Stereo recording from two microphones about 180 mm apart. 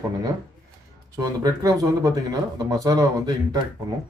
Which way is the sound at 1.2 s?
20° right (ahead or behind).